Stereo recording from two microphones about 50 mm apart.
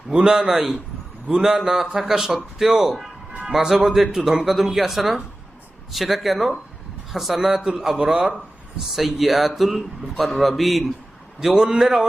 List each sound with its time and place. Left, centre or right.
0.3 s speech: centre
8.9 s speech: centre